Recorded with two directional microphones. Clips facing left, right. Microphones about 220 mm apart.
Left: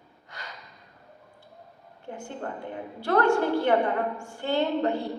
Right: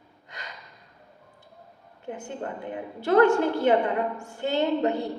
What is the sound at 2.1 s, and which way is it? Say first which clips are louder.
A woman's voice: right 2 dB; 20° right (ahead or behind).